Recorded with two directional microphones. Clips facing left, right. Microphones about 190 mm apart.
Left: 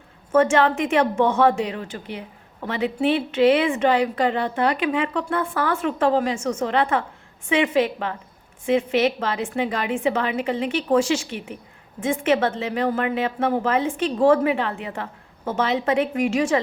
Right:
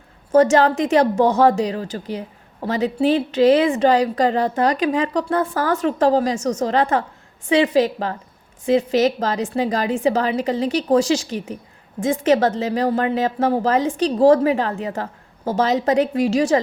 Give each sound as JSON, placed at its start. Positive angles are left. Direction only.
{"t": 0.3, "sound": "a woman's voice", "side_deg": -40}